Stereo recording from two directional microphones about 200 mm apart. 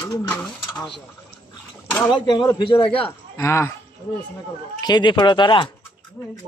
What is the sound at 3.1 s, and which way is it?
Speech, 15° left (ahead or behind).